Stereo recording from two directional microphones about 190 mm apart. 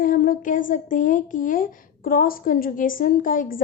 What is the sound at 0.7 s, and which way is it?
A woman's voice, 45° left (ahead or behind).